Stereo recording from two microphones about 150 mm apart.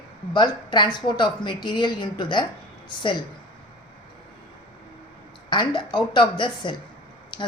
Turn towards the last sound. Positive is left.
turn(degrees=30)  # may be behind; listen again after turning